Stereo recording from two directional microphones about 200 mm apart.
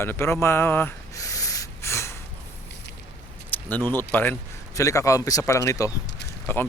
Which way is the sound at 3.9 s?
10° left (ahead or behind).